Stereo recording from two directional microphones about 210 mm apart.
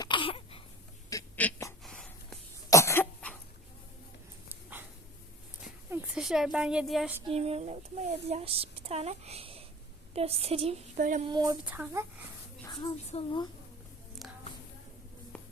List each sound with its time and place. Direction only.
0.0 s a sound: 25° left (ahead or behind)
1.1 s a sound: 10° left (ahead or behind)
2.6 s cough: 15° left (ahead or behind)
4.4 s dog: 10° right (ahead or behind)
5.6 s a sound: 5° right (ahead or behind)
7.3 s a woman's voice: 30° right (ahead or behind)
11.3 s speech: 20° right (ahead or behind)
11.6 s speech: 5° right (ahead or behind)
13.1 s a woman's voice: 25° left (ahead or behind)